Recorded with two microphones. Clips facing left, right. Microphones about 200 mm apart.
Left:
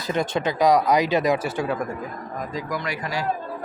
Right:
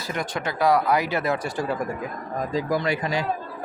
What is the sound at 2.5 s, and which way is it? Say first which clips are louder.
Speech: right 6 dB; 30° right (ahead or behind).